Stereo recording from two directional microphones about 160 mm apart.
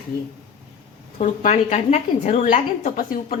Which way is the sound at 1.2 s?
50° left (ahead or behind).